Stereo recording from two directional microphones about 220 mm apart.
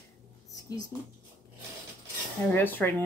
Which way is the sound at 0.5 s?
15° left (ahead or behind).